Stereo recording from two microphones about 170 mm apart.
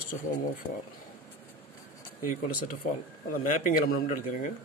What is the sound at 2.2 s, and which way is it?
Speech, 55° left (ahead or behind).